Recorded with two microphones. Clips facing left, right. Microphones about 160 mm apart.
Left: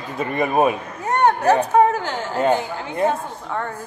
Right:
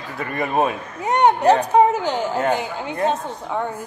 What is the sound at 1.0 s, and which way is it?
Speech, 15° right (ahead or behind).